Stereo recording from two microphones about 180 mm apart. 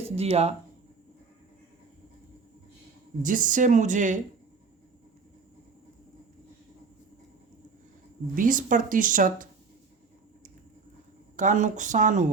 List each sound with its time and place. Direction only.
0.2 s speech: 35° right (ahead or behind)
3.2 s speech: 45° right (ahead or behind)
8.4 s speech: 50° right (ahead or behind)
11.3 s speech: 45° right (ahead or behind)